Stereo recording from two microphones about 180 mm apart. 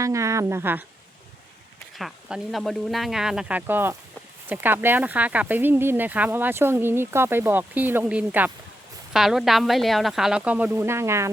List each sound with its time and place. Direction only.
0.0 s speech: 15° right (ahead or behind)
2.0 s speech: centre (ahead or behind)